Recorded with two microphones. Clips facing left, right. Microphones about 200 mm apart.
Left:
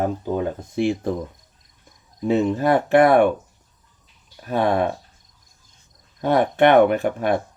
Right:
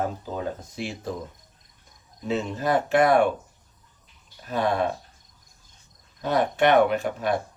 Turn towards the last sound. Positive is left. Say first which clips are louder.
# left 4 dB
turn(degrees=55)  # may be behind; listen again after turning